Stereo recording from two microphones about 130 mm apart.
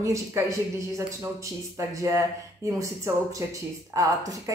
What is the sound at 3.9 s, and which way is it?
Speech, 25° right (ahead or behind).